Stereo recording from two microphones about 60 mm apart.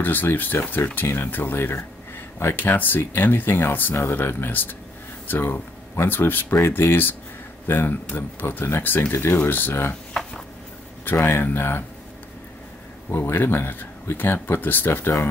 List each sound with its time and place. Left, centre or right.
0.0 s speech: left
11.1 s speech: left
13.1 s speech: left